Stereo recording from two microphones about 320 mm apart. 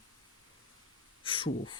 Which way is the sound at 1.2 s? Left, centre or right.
Centre.